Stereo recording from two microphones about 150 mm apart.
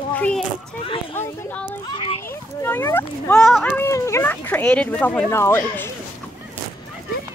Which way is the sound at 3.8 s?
15° left (ahead or behind).